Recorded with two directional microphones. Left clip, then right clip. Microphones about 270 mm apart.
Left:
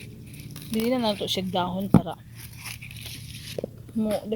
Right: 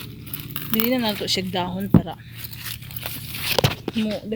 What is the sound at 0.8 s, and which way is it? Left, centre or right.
Speech, centre.